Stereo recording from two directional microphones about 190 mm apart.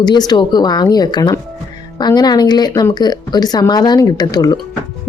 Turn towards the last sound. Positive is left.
turn(degrees=20)  # may be behind; listen again after turning